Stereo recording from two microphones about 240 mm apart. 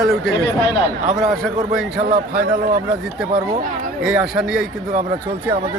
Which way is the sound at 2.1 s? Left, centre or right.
Right.